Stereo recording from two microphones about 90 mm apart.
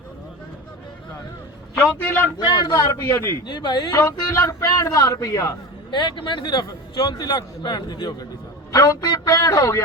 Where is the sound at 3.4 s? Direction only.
55° left (ahead or behind).